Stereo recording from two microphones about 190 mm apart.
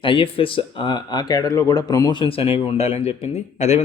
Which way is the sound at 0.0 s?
25° left (ahead or behind).